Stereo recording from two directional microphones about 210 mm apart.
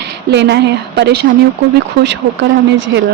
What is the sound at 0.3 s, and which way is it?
Speech, 55° right (ahead or behind).